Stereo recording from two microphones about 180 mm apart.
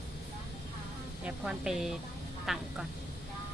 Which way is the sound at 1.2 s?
5° right (ahead or behind).